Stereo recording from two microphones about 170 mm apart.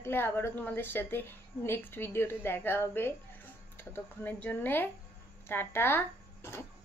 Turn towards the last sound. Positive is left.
turn(degrees=15)  # may be behind; listen again after turning